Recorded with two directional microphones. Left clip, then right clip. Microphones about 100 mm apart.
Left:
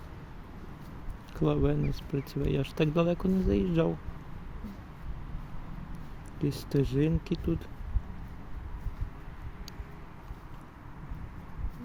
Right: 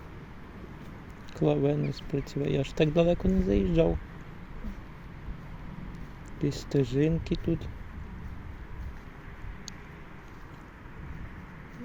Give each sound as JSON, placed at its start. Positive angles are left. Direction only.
{"t": 1.4, "sound": "speech", "side_deg": 30}
{"t": 6.4, "sound": "speech", "side_deg": 30}